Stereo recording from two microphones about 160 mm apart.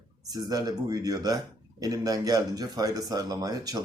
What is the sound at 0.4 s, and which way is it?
A man's voice, 25° right (ahead or behind).